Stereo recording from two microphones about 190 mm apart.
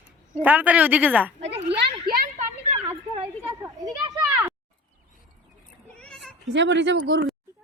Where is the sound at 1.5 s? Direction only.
30° right (ahead or behind).